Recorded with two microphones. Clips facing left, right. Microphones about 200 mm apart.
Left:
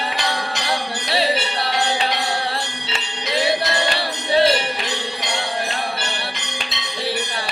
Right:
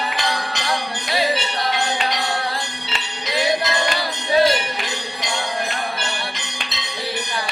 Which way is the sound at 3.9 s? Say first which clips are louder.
Right 1 dB; 30° left (ahead or behind).